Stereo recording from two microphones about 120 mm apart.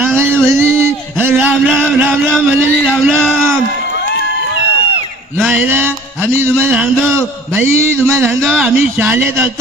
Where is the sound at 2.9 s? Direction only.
5° left (ahead or behind).